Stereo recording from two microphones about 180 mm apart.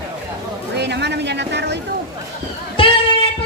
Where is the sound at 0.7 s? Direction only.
70° right (ahead or behind).